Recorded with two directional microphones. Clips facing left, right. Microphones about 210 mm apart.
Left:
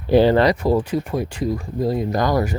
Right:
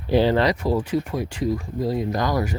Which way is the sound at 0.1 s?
55° left (ahead or behind).